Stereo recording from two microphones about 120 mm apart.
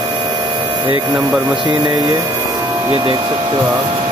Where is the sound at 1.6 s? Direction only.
40° right (ahead or behind).